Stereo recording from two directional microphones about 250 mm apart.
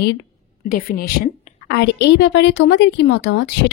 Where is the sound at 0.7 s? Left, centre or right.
Left.